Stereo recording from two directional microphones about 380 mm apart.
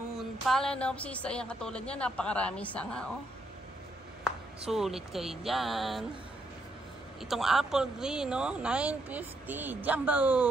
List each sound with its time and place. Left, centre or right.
0.5 s speech: centre
4.6 s speech: centre
7.2 s speech: centre